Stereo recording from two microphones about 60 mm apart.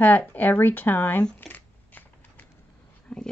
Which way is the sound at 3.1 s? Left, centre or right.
Centre.